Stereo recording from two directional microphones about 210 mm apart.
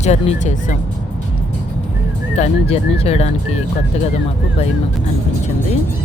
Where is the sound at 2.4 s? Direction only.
30° left (ahead or behind).